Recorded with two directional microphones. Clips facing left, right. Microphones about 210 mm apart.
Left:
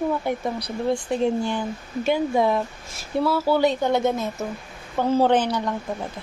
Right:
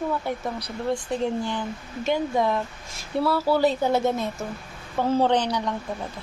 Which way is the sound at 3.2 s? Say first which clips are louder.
Left 1 dB; centre (ahead or behind).